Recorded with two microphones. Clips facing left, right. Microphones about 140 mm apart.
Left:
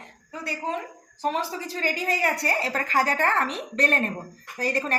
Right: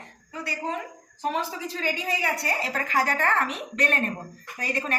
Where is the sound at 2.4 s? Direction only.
35° left (ahead or behind).